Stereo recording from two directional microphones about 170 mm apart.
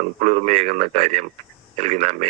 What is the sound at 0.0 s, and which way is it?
Speech, 45° right (ahead or behind).